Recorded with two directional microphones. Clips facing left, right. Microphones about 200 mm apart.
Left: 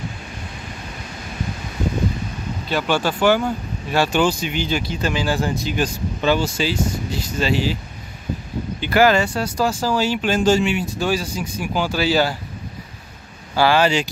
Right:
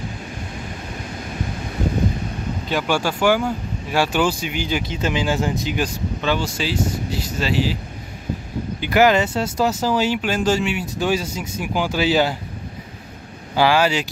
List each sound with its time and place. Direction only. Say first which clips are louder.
2.7 s speech: left 1 dB; 10° right (ahead or behind)
6.2 s speech: left 4 dB; 5° left (ahead or behind)
8.8 s speech: even; 15° right (ahead or behind)
10.2 s speech: left 3 dB; 5° right (ahead or behind)
11.0 s speech: even; 20° right (ahead or behind)
13.6 s speech: left 1 dB; 10° right (ahead or behind)